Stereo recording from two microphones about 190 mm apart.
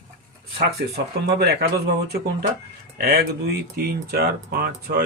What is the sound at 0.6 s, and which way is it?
Speech, 60° right (ahead or behind).